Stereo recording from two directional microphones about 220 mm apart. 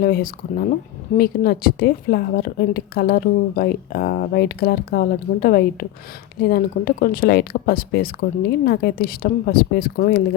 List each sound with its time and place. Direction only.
0.0 s a woman's voice: 40° left (ahead or behind)